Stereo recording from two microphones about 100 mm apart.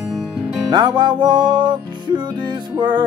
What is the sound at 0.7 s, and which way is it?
Music, 45° right (ahead or behind).